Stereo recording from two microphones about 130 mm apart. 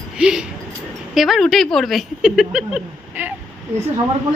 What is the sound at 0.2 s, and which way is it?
Speech, 5° right (ahead or behind).